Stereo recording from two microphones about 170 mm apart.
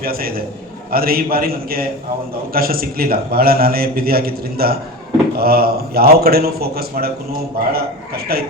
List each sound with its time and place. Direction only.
0.0 s a man's voice: 60° right (ahead or behind)